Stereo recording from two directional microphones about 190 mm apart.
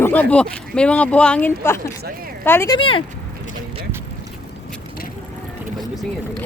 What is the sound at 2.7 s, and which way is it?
Speech, 25° left (ahead or behind).